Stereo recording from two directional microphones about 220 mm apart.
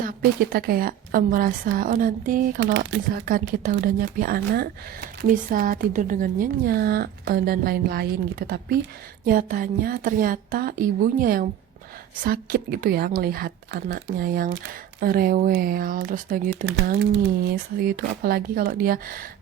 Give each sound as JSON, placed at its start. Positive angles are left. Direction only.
{"t": 0.0, "sound": "speech", "side_deg": -40}
{"t": 2.6, "sound": "speech", "side_deg": -55}
{"t": 3.1, "sound": "a woman's voice", "side_deg": -40}
{"t": 17.7, "sound": "speech", "side_deg": -40}